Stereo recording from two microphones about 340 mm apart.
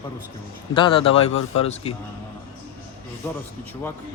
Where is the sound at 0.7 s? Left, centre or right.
Centre.